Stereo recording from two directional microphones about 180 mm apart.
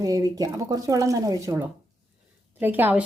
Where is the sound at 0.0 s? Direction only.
20° right (ahead or behind).